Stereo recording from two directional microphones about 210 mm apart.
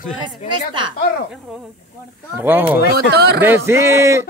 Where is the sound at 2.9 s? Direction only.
50° right (ahead or behind).